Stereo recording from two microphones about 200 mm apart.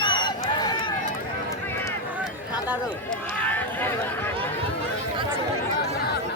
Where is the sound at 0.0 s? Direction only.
20° left (ahead or behind).